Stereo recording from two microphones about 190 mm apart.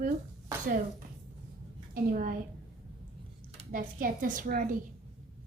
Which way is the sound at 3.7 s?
45° right (ahead or behind).